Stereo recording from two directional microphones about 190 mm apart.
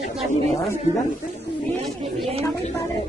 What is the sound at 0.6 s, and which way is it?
Speech, 15° left (ahead or behind).